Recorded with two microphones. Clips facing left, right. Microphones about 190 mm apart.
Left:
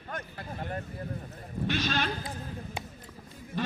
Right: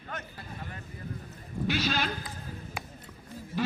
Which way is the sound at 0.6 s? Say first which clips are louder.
Left 9 dB; 50° left (ahead or behind).